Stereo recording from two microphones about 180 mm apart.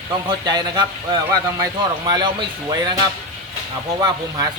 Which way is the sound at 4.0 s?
20° right (ahead or behind).